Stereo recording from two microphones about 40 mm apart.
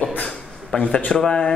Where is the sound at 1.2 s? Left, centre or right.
Left.